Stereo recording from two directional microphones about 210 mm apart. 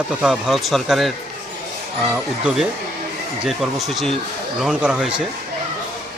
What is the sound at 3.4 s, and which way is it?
Speech, centre (ahead or behind).